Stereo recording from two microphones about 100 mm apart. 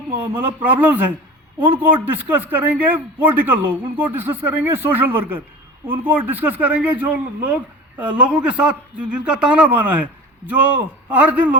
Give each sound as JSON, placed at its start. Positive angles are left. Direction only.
{"t": 0.1, "sound": "a man's voice", "side_deg": -20}